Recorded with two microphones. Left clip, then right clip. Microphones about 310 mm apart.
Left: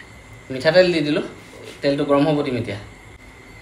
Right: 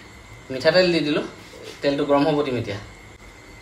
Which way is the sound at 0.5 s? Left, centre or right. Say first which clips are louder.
Left 2 dB; centre.